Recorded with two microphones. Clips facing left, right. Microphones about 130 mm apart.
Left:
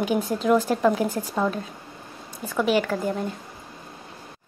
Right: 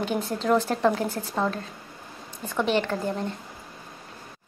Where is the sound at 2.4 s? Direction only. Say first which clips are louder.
Left 2 dB; 5° left (ahead or behind).